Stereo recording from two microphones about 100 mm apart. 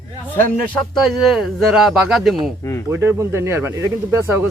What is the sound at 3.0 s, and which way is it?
Speech, 30° right (ahead or behind).